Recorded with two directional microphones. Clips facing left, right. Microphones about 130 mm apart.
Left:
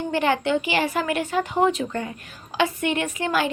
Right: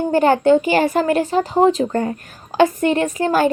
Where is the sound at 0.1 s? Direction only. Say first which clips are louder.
Right 9 dB; 40° right (ahead or behind).